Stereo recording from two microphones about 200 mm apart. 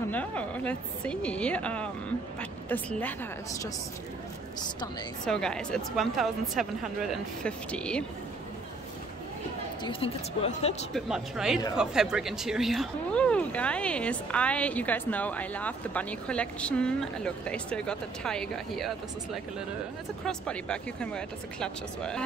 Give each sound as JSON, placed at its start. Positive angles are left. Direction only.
{"t": 0.1, "sound": "a woman's voice", "side_deg": 5}
{"t": 5.2, "sound": "speech", "side_deg": 5}
{"t": 9.8, "sound": "speech", "side_deg": 30}
{"t": 10.9, "sound": "speech", "side_deg": 0}